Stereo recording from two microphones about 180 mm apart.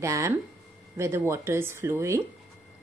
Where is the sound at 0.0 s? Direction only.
15° right (ahead or behind).